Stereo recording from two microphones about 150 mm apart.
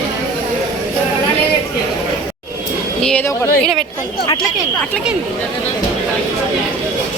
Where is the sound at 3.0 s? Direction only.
5° left (ahead or behind).